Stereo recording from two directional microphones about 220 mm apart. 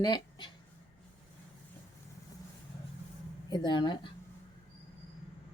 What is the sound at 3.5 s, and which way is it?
Speech, 20° left (ahead or behind).